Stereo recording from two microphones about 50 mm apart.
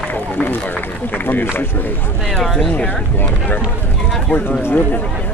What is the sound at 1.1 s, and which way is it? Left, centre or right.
Speech, left.